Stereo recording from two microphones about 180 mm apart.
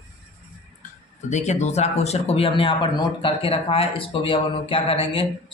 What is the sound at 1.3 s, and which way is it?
Speech, 40° left (ahead or behind).